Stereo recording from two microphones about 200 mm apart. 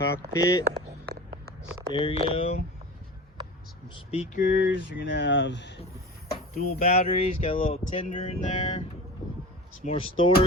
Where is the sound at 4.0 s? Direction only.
30° left (ahead or behind).